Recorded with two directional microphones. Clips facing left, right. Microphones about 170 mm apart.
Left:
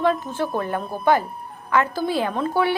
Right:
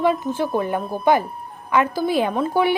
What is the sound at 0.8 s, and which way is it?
A woman's voice, 5° right (ahead or behind).